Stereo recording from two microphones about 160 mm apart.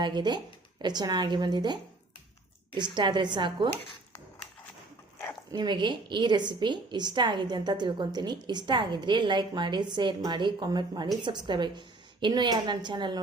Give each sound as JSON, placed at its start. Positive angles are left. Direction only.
{"t": 0.0, "sound": "a woman's voice", "side_deg": -25}
{"t": 5.5, "sound": "a woman's voice", "side_deg": -30}